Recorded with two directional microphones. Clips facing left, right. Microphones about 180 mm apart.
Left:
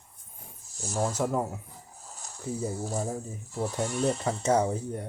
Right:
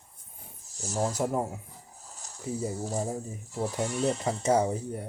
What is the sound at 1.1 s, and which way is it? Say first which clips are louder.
Speech: left 1 dB; 10° right (ahead or behind).